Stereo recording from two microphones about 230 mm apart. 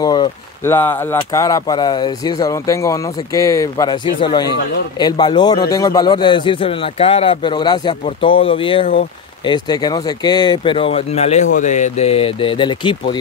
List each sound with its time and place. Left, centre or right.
0.0 s speech: centre